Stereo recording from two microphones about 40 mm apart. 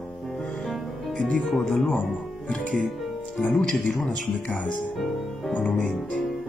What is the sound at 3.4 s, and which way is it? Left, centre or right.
Speech, left.